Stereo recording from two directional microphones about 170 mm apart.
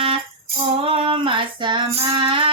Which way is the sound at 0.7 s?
35° right (ahead or behind).